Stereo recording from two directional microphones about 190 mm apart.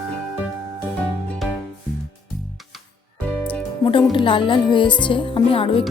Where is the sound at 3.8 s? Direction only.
25° left (ahead or behind).